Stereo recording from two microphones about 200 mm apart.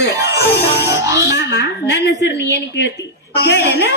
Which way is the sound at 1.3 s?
60° left (ahead or behind).